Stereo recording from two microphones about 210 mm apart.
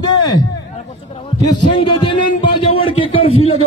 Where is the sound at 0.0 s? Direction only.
20° left (ahead or behind).